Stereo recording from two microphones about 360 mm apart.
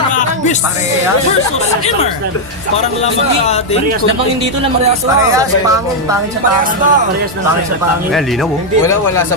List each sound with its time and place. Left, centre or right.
0.1 s music: left
3.4 s speech: centre
5.3 s speech: centre
6.6 s music: right
8.8 s speech: centre